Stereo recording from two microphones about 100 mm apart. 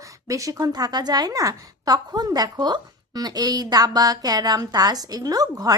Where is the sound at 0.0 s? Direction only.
35° right (ahead or behind).